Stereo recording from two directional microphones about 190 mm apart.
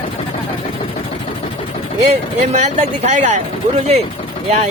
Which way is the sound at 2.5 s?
35° right (ahead or behind).